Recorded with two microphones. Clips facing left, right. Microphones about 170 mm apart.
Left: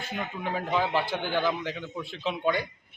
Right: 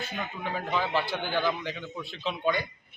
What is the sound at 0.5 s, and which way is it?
A man's voice, 10° left (ahead or behind).